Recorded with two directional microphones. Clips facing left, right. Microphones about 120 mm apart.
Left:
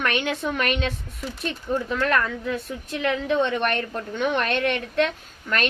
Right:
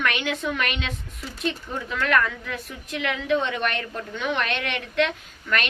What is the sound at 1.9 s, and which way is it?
A woman's voice, 35° left (ahead or behind).